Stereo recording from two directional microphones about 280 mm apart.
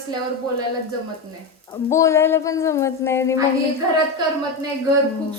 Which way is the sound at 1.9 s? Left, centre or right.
Centre.